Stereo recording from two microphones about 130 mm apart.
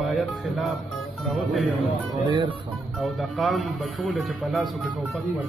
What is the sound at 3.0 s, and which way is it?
Speech, centre (ahead or behind).